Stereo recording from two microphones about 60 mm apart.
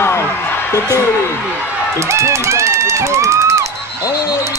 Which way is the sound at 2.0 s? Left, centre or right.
Right.